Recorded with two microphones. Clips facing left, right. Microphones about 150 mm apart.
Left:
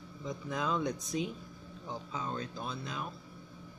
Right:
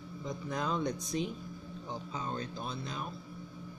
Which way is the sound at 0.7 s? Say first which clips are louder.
Left 1 dB; 30° right (ahead or behind).